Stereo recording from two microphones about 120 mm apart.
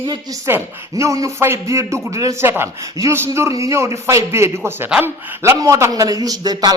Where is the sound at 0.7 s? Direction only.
25° right (ahead or behind).